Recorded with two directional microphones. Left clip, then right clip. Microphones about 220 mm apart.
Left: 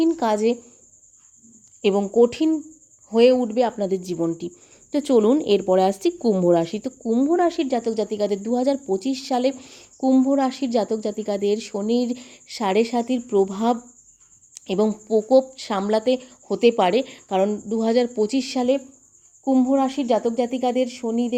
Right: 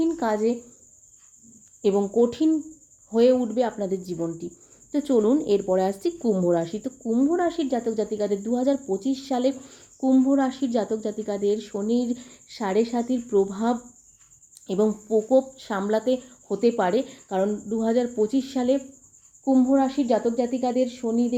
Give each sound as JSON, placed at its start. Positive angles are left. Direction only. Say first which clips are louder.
{"t": 0.0, "sound": "speech", "louder": "left 4 dB", "side_deg": 35}
{"t": 1.8, "sound": "speech", "louder": "left 3 dB", "side_deg": 30}